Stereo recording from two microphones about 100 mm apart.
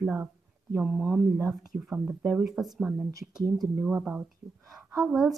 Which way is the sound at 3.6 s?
30° right (ahead or behind).